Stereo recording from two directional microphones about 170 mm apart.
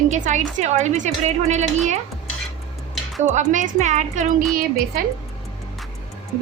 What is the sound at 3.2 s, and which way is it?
A woman's voice, 45° right (ahead or behind).